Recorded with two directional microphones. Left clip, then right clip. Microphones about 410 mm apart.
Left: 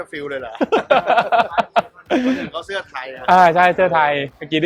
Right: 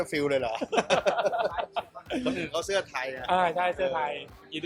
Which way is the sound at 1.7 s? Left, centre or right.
Left.